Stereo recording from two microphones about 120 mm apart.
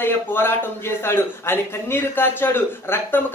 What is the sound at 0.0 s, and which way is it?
Speech, 20° left (ahead or behind).